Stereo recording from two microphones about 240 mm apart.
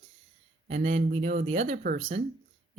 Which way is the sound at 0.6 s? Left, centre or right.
Right.